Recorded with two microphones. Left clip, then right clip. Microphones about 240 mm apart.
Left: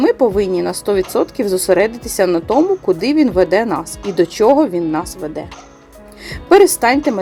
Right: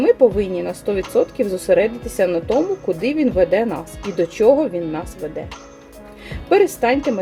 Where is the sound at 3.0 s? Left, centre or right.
Left.